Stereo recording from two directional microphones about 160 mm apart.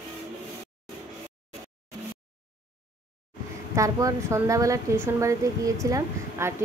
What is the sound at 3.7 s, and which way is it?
A woman's voice, 20° right (ahead or behind).